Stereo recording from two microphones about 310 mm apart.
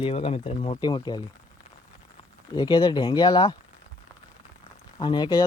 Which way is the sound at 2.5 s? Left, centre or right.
Centre.